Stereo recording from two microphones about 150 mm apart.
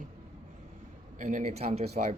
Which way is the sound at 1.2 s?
55° right (ahead or behind).